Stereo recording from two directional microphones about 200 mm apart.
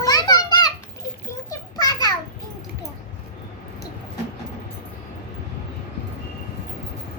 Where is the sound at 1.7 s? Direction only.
20° left (ahead or behind).